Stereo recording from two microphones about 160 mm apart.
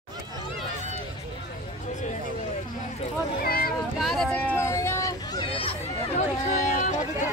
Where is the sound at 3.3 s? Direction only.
65° left (ahead or behind).